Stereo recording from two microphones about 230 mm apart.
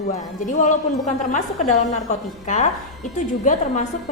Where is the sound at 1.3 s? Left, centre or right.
Left.